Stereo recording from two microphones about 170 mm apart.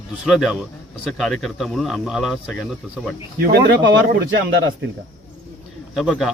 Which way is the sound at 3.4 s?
70° right (ahead or behind).